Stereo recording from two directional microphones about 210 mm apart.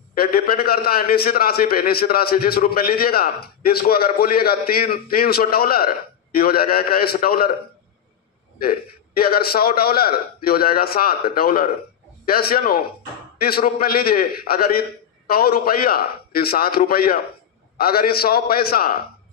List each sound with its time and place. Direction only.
0.1 s a man's voice: 45° left (ahead or behind)
8.6 s a man's voice: 45° left (ahead or behind)